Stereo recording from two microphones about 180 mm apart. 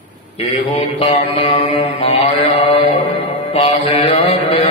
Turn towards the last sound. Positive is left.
turn(degrees=30)  # may be behind; listen again after turning